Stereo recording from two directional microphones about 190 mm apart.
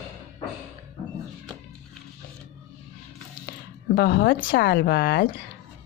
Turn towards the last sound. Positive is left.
turn(degrees=50)  # may be behind; listen again after turning